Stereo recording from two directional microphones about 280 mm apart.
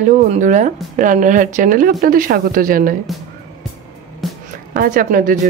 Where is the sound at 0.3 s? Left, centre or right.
Right.